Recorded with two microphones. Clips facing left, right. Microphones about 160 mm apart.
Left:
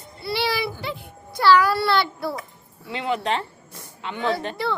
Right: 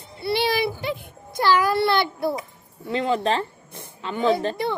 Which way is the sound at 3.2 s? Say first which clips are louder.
Right 2 dB; 30° right (ahead or behind).